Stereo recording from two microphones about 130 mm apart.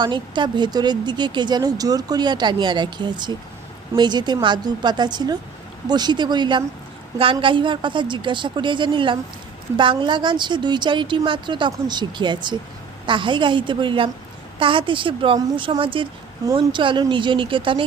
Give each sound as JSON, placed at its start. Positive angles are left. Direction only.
{"t": 0.0, "sound": "speech", "side_deg": -35}